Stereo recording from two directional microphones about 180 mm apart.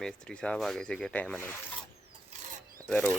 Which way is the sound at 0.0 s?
5° left (ahead or behind).